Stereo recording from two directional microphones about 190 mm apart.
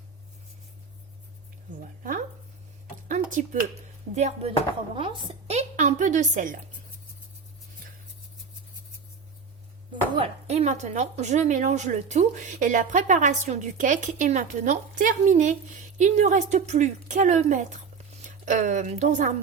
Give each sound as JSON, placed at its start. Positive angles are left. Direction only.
{"t": 1.8, "sound": "a woman's voice", "side_deg": -45}
{"t": 3.1, "sound": "a sound", "side_deg": -40}
{"t": 4.1, "sound": "a woman's voice", "side_deg": -35}
{"t": 9.9, "sound": "speech", "side_deg": -30}